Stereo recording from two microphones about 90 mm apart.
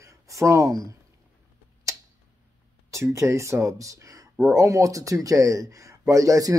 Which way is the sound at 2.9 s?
35° right (ahead or behind).